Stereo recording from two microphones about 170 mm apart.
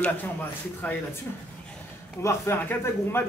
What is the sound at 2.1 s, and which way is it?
A man's voice, 15° left (ahead or behind).